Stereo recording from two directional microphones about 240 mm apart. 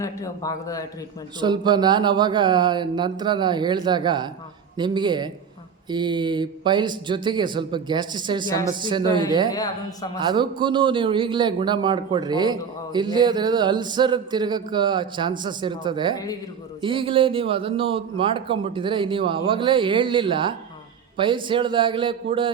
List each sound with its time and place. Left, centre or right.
0.0 s a man's voice: centre
1.4 s a man's voice: centre
9.5 s a man's voice: centre
10.2 s a man's voice: centre
16.1 s a man's voice: centre
16.8 s a man's voice: right